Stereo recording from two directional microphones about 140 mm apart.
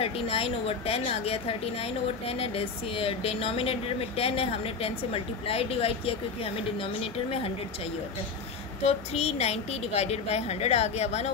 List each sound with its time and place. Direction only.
0.0 s a woman's voice: 45° left (ahead or behind)
8.8 s a woman's voice: 50° left (ahead or behind)